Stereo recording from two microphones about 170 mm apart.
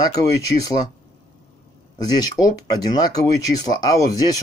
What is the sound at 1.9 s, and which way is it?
Speech, 25° left (ahead or behind).